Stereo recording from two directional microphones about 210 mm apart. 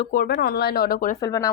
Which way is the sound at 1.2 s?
15° left (ahead or behind).